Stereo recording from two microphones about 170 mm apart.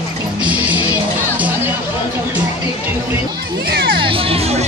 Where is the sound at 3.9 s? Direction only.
30° right (ahead or behind).